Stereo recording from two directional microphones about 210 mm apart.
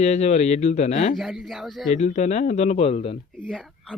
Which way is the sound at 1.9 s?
35° left (ahead or behind).